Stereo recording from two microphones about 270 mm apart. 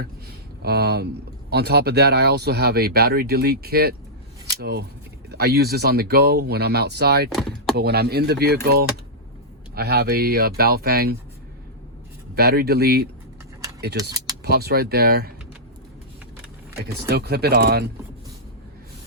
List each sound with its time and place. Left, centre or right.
0.0 s a sound: right
1.5 s speech: right
7.3 s speech: centre
7.8 s speech: right
12.3 s speech: right
17.1 s speech: right